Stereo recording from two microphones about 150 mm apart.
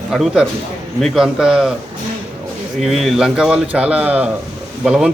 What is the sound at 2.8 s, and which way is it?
A man's voice, centre (ahead or behind).